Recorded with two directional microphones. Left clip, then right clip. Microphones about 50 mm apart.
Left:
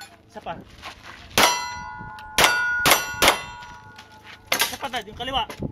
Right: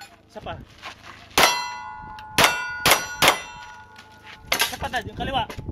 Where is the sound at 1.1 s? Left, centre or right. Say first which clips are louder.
Even; centre.